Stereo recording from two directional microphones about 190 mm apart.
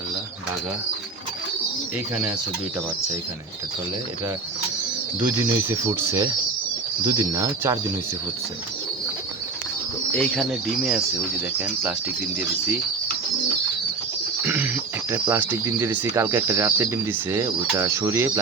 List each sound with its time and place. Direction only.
5.2 s speech: 15° right (ahead or behind)
10.2 s speech: centre (ahead or behind)
14.4 s speech: 10° right (ahead or behind)